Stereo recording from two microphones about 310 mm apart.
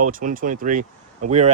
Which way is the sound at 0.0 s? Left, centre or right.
Right.